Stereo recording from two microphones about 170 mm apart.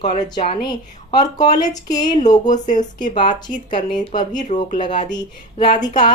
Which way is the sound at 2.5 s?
50° left (ahead or behind).